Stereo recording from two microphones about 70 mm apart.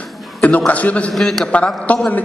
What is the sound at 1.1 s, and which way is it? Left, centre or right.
Speech, centre.